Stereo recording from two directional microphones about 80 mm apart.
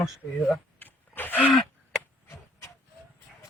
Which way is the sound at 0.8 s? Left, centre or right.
Left.